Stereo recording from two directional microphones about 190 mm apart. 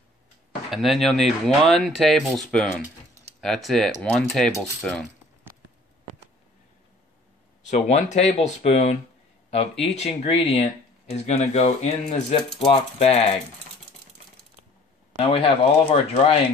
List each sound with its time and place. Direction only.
0.7 s speech: centre (ahead or behind)
7.7 s speech: 35° left (ahead or behind)
15.1 s speech: 30° left (ahead or behind)